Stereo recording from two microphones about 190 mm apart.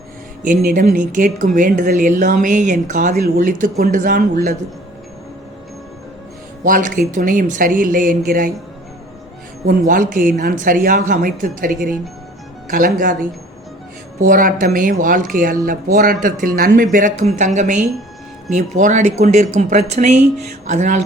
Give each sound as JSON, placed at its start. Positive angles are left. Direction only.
{"t": 0.4, "sound": "speech", "side_deg": -45}
{"t": 6.7, "sound": "speech", "side_deg": -45}
{"t": 9.6, "sound": "speech", "side_deg": -45}